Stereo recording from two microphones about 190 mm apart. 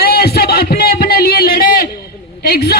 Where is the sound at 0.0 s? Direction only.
55° left (ahead or behind).